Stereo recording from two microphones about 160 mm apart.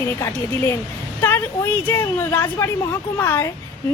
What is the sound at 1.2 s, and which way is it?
A woman's voice, 15° left (ahead or behind).